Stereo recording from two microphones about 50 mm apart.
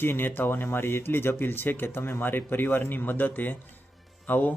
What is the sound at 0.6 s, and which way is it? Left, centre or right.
Speech, left.